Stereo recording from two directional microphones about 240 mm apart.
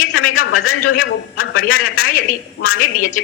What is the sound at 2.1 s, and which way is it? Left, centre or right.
Speech, left.